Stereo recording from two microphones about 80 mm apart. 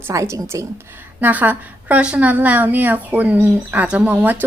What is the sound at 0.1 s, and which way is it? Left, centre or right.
Speech, right.